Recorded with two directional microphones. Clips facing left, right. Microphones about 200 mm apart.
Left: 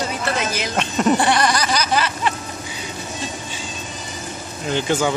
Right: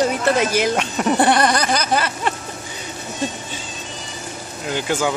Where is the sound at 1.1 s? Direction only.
55° right (ahead or behind).